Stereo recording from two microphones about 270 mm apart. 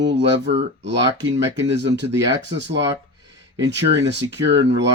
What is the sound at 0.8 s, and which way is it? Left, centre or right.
Speech, right.